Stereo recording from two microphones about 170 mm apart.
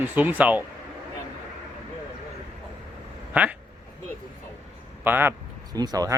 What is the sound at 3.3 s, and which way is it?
Speech, 10° right (ahead or behind).